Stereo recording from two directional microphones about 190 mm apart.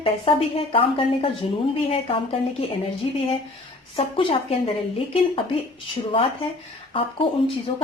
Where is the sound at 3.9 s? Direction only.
30° left (ahead or behind).